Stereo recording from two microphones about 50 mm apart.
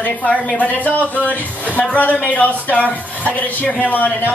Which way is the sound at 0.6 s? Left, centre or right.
Left.